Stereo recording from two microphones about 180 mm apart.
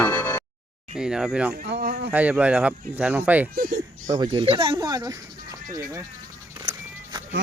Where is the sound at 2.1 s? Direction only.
10° right (ahead or behind).